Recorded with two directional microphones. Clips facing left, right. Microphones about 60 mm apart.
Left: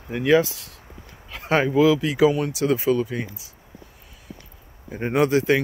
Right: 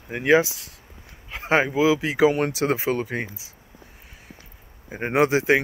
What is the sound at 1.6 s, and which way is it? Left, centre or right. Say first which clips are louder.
Speech: left 3 dB; centre.